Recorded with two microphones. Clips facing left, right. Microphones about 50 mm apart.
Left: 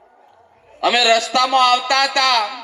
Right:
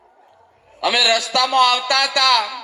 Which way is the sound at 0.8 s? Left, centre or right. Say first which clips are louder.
Left 3 dB; left.